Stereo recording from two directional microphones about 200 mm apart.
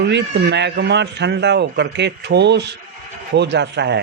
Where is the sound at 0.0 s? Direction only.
55° right (ahead or behind).